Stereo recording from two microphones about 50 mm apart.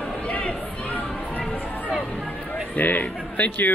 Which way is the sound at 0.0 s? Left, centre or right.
Left.